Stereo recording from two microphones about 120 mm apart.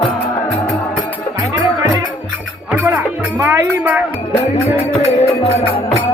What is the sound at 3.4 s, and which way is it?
Music, 15° right (ahead or behind).